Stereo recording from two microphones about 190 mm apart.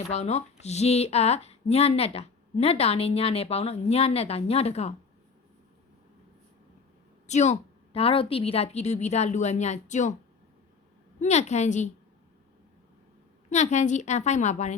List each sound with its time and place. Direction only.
0.1 s speech: 35° left (ahead or behind)
7.3 s speech: 35° left (ahead or behind)
11.2 s speech: 35° left (ahead or behind)
13.5 s speech: 35° left (ahead or behind)